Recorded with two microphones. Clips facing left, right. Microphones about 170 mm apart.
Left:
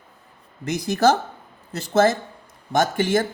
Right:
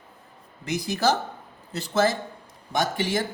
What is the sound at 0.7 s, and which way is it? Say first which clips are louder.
Speech: left 5 dB; 45° left (ahead or behind).